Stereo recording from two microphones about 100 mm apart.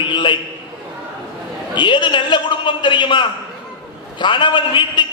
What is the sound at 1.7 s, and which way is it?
A man's voice, 50° left (ahead or behind).